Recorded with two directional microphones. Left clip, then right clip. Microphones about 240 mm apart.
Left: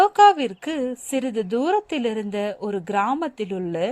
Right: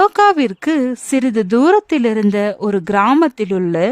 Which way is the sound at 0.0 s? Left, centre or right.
Right.